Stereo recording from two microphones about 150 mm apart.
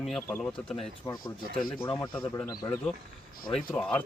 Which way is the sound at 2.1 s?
15° left (ahead or behind).